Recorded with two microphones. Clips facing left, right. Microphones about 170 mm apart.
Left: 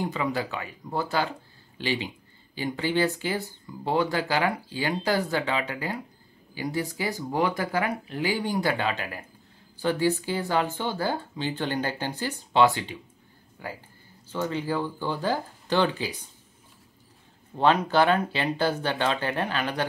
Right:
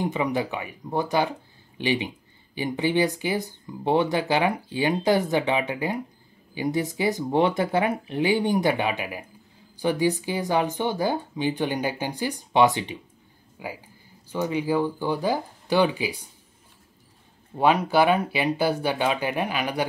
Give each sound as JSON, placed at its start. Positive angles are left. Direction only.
{"t": 0.0, "sound": "speech", "side_deg": -20}
{"t": 17.6, "sound": "speech", "side_deg": -10}